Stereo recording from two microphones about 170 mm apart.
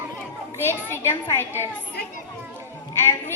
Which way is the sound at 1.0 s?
15° left (ahead or behind).